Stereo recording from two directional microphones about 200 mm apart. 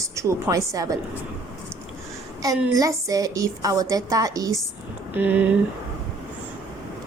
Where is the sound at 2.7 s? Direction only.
15° right (ahead or behind).